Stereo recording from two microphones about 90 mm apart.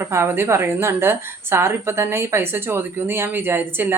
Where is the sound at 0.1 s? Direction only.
30° right (ahead or behind).